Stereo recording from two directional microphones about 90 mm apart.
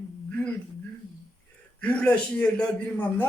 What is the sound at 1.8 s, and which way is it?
A man's voice, 10° left (ahead or behind).